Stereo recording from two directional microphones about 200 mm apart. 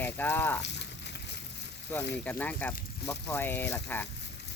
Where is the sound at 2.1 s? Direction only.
10° left (ahead or behind).